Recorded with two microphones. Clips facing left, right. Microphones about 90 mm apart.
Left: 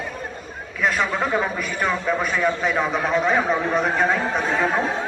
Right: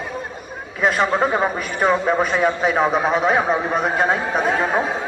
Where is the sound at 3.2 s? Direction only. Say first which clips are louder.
Right 2 dB; 10° right (ahead or behind).